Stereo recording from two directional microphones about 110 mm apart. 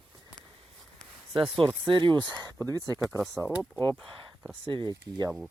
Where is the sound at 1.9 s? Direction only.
45° right (ahead or behind).